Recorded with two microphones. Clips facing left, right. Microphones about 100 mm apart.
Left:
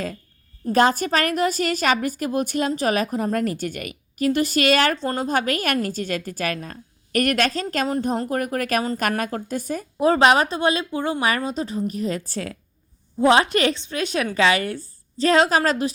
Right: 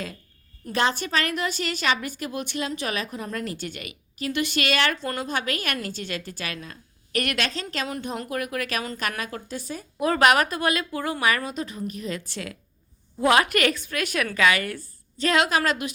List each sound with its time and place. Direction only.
0.6 s a woman's voice: 40° left (ahead or behind)
10.0 s a woman's voice: 30° left (ahead or behind)
13.1 s a woman's voice: 25° left (ahead or behind)